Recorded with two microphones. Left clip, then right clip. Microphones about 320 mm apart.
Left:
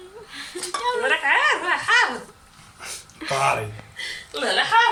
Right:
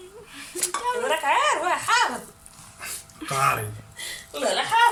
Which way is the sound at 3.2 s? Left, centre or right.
Centre.